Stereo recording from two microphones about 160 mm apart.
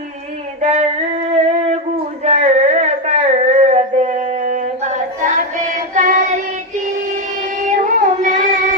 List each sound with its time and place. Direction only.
0.6 s female singing: 45° right (ahead or behind)
2.2 s a sound: 45° right (ahead or behind)
7.7 s music: 50° right (ahead or behind)